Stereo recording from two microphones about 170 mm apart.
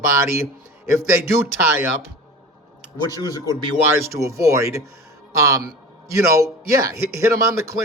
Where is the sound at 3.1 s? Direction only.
20° left (ahead or behind).